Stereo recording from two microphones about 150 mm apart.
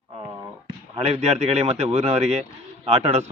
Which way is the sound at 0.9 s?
45° right (ahead or behind).